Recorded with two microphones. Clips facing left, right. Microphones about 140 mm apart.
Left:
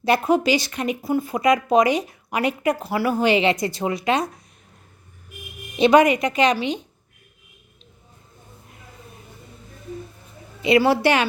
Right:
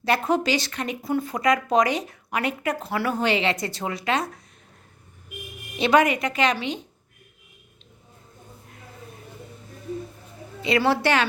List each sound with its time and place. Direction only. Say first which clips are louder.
0.0 s speech: left 4 dB; 10° left (ahead or behind)
5.8 s speech: left 5 dB; 15° left (ahead or behind)
10.6 s speech: left 4 dB; 10° left (ahead or behind)